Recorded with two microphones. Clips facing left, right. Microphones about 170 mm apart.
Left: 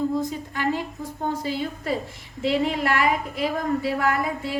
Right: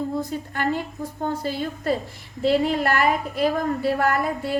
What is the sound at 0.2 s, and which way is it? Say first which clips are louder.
Speech: even; 55° right (ahead or behind).